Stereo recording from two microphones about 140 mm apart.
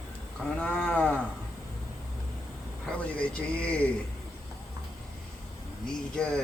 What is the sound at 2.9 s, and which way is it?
Speech, 10° left (ahead or behind).